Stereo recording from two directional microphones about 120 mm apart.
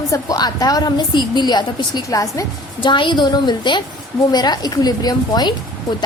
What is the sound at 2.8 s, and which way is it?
A woman's voice, 40° left (ahead or behind).